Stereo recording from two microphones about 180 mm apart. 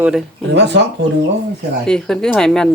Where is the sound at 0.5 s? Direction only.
75° right (ahead or behind).